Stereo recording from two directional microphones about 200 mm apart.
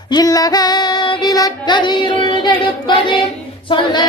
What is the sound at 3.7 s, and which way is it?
Female singing, 25° left (ahead or behind).